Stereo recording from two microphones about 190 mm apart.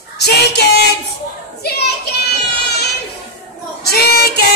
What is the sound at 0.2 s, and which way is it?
Child singing, 60° left (ahead or behind).